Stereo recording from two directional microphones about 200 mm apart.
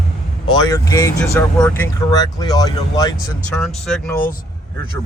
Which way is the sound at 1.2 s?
5° left (ahead or behind).